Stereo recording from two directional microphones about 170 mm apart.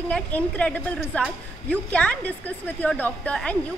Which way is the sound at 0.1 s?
5° left (ahead or behind).